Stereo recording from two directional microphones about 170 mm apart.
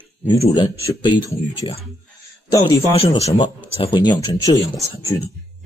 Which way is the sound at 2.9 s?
35° left (ahead or behind).